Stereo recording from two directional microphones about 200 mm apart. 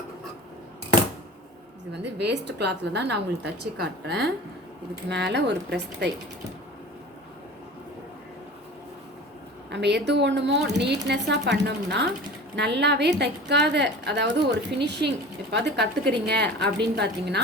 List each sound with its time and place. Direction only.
1.9 s a woman's voice: 60° right (ahead or behind)
9.7 s a woman's voice: 60° right (ahead or behind)